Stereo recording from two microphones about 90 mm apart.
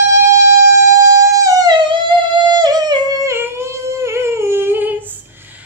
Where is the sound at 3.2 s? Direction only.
30° right (ahead or behind).